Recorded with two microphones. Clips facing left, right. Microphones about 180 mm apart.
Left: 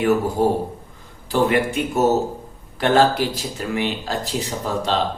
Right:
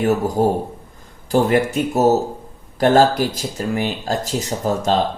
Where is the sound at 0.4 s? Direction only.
45° right (ahead or behind).